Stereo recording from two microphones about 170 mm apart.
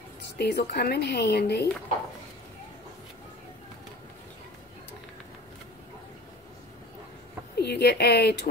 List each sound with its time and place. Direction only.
0.4 s speech: 70° left (ahead or behind)
7.5 s speech: 75° left (ahead or behind)